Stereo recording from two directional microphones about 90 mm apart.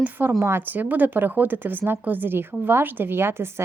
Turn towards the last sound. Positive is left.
turn(degrees=-25)  # may be behind; listen again after turning